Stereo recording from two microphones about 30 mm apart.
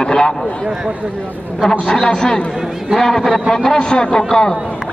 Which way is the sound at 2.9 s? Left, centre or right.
Centre.